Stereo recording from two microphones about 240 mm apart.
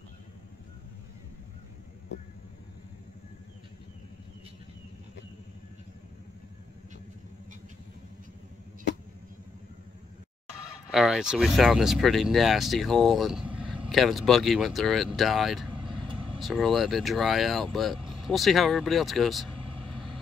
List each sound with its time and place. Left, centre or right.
10.9 s speech: centre
15.7 s vehicle: right
16.3 s speech: centre